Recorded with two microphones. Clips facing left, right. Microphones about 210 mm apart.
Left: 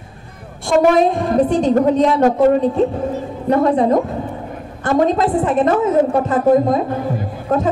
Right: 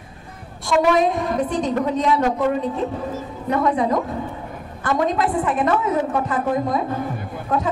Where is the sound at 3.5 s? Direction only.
35° left (ahead or behind).